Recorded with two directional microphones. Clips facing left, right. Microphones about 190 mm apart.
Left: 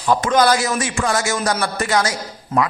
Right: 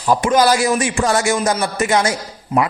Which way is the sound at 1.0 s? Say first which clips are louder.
Right 4 dB; 30° right (ahead or behind).